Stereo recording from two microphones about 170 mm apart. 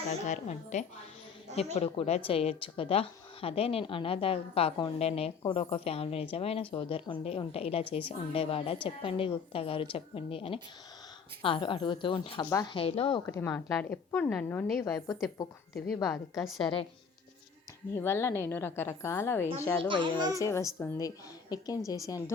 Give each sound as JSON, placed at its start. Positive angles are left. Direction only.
{"t": 0.3, "sound": "a woman's voice", "side_deg": 45}
{"t": 12.5, "sound": "a woman's voice", "side_deg": 20}
{"t": 12.7, "sound": "a woman's voice", "side_deg": 30}
{"t": 13.2, "sound": "a woman's voice", "side_deg": 15}
{"t": 17.9, "sound": "a woman's voice", "side_deg": 15}
{"t": 19.9, "sound": "a child's voice", "side_deg": -25}
{"t": 20.4, "sound": "a woman's voice", "side_deg": 15}